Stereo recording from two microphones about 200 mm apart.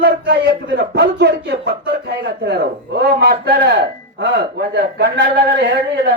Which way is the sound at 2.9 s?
55° right (ahead or behind).